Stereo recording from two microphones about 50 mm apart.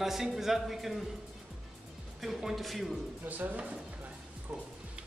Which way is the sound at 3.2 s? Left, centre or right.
Right.